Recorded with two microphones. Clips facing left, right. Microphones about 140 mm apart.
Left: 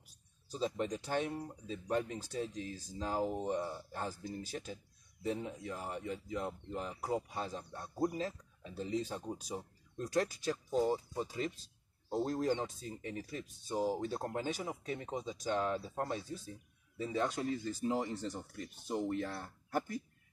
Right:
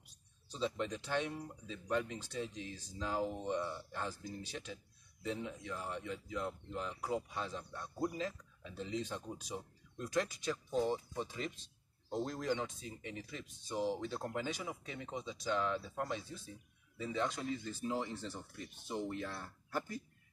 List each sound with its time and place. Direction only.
0.5 s speech: 40° left (ahead or behind)
10.7 s speech: 5° left (ahead or behind)
11.2 s speech: 40° left (ahead or behind)
18.3 s speech: 15° left (ahead or behind)
18.9 s speech: 45° left (ahead or behind)